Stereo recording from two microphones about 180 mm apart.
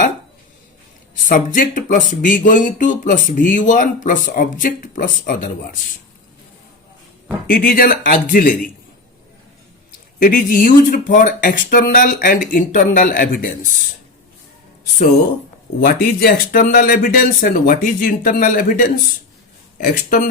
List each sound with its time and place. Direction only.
1.1 s speech: 45° left (ahead or behind)
7.5 s speech: 55° left (ahead or behind)
10.2 s speech: 50° left (ahead or behind)
15.8 s speech: 55° left (ahead or behind)